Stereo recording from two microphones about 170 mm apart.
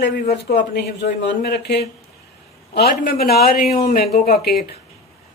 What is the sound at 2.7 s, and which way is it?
Speech, 70° left (ahead or behind).